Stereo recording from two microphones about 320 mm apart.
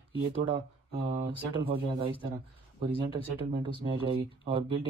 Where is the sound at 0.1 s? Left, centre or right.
Centre.